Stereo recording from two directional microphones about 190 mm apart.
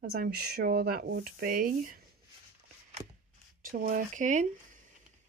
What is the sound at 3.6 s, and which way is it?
Speech, 45° right (ahead or behind).